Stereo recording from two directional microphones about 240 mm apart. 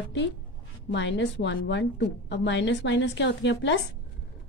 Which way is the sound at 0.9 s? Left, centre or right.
Left.